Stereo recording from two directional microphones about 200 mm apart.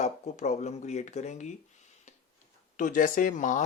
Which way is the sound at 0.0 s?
35° left (ahead or behind).